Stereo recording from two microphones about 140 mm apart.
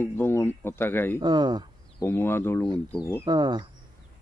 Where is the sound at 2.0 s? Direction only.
15° left (ahead or behind).